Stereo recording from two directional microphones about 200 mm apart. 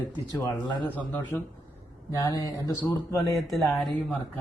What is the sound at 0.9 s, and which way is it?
A man's voice, 10° left (ahead or behind).